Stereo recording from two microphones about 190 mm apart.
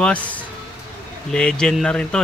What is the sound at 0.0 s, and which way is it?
Speech, 5° left (ahead or behind).